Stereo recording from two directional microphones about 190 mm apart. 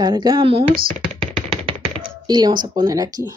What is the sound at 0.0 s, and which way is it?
Speech, 20° right (ahead or behind).